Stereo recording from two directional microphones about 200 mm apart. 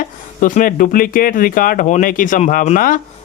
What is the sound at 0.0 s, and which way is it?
Speech, 40° left (ahead or behind).